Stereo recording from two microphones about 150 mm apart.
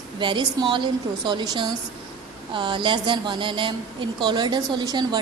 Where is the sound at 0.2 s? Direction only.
35° right (ahead or behind).